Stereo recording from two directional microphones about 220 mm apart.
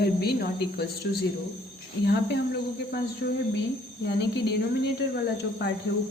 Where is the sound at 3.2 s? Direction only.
55° left (ahead or behind).